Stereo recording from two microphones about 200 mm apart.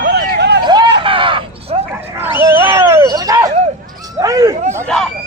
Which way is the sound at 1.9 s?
10° right (ahead or behind).